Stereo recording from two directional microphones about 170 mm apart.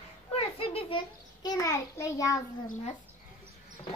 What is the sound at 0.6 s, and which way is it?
A child's voice, 30° left (ahead or behind).